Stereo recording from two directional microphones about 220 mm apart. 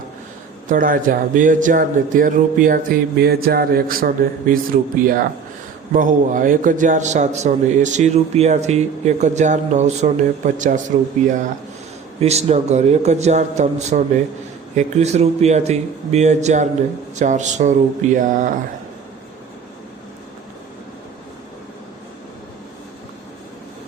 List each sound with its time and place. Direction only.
0.7 s a man's voice: 40° right (ahead or behind)
12.2 s a man's voice: 30° right (ahead or behind)